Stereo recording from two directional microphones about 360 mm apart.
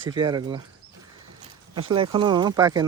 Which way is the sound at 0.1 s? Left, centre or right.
Centre.